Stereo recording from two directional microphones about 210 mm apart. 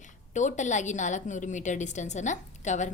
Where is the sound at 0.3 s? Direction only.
35° left (ahead or behind).